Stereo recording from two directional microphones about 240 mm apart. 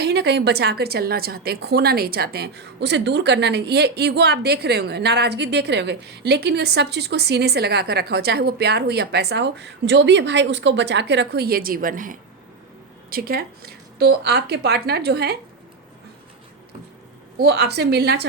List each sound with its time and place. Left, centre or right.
0.0 s a woman's voice: right
17.3 s a woman's voice: right